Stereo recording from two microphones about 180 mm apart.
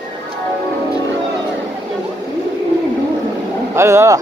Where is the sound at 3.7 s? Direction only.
15° right (ahead or behind).